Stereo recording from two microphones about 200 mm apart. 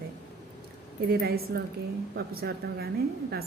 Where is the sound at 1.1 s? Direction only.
50° right (ahead or behind).